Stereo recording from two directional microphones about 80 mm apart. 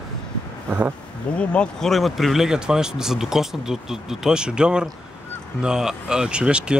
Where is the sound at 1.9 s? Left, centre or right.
Centre.